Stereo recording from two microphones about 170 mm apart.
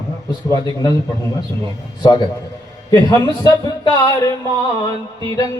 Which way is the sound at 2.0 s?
25° left (ahead or behind).